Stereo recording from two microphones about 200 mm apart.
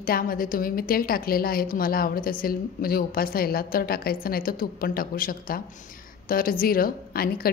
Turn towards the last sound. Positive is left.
turn(degrees=50)  # may be behind; listen again after turning